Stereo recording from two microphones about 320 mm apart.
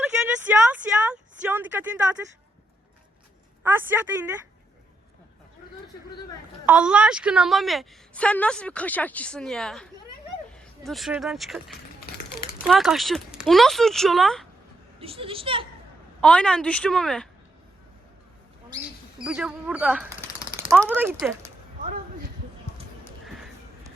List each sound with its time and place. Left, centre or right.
0.4 s a sound: centre
3.6 s a woman's voice: centre
6.7 s a woman's voice: centre
15.0 s speech: centre
16.2 s a woman's voice: centre
19.2 s a woman's voice: centre
23.0 s a sound: centre